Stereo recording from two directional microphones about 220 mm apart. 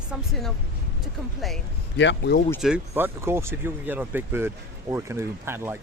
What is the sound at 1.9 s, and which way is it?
Speech, 50° left (ahead or behind).